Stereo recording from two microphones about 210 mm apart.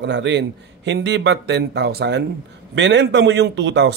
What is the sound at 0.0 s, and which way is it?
A man's voice, 55° right (ahead or behind).